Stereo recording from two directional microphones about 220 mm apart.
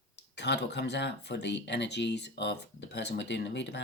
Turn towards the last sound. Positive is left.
turn(degrees=50)  # may be behind; listen again after turning